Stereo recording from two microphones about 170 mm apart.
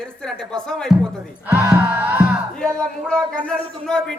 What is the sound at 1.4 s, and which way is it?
Choir, 10° right (ahead or behind).